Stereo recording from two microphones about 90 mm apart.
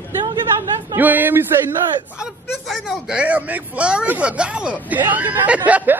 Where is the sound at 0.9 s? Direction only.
20° right (ahead or behind).